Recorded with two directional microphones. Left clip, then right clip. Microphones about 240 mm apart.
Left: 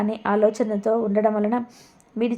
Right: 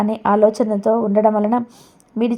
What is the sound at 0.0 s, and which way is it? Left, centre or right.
A woman's voice, right.